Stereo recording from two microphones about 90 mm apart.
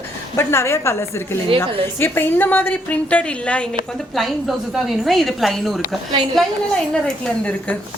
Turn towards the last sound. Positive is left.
turn(degrees=15)  # may be behind; listen again after turning